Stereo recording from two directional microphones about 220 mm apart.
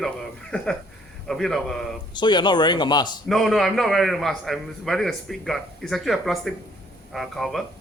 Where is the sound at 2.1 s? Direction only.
20° left (ahead or behind).